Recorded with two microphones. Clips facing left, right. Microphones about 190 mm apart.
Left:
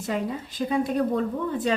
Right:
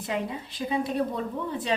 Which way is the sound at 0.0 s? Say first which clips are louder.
Left 3 dB; 45° left (ahead or behind).